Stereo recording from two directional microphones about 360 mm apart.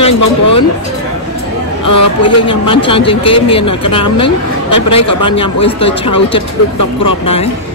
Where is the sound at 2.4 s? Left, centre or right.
Centre.